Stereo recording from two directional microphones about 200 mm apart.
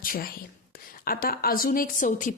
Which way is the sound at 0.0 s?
45° left (ahead or behind).